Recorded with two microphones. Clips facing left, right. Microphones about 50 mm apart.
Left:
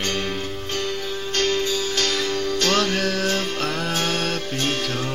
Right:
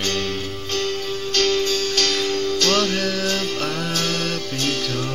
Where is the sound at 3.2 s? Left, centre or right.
Left.